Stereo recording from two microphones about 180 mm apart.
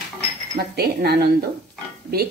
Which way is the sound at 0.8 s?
60° right (ahead or behind).